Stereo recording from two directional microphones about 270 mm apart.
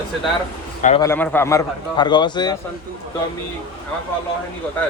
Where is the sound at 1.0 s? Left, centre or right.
Centre.